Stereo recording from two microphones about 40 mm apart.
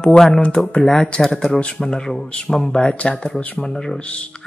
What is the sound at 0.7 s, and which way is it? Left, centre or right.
Speech, centre.